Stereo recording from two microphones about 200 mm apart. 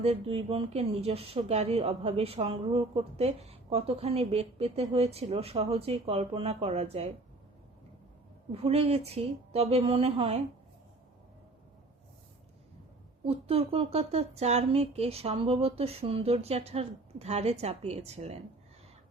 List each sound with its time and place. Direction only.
0.0 s speech: 30° right (ahead or behind)
8.5 s speech: 30° right (ahead or behind)
13.2 s speech: 30° right (ahead or behind)